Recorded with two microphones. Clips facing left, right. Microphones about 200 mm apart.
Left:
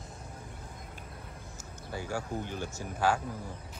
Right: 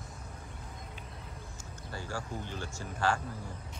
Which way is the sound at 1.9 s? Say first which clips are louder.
Left 4 dB; 15° left (ahead or behind).